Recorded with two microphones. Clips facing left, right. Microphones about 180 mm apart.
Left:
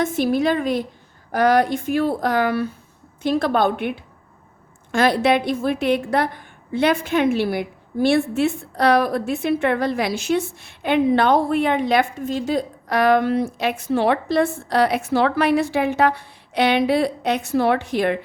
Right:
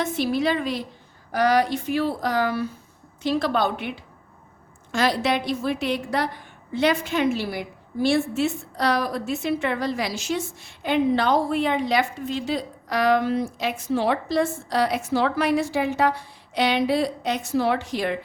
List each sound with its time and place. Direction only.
0.0 s a woman's voice: 50° left (ahead or behind)